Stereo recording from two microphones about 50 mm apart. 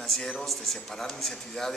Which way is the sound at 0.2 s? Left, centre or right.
Centre.